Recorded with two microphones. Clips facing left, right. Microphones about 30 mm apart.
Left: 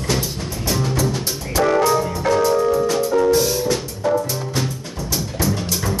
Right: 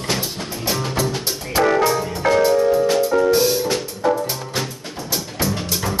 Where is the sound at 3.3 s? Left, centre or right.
Right.